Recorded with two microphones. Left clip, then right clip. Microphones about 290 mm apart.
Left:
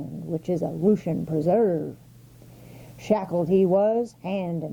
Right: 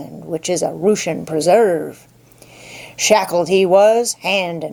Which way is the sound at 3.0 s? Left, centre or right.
Centre.